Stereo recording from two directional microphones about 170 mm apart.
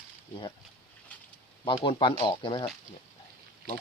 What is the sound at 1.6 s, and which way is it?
Speech, 30° left (ahead or behind).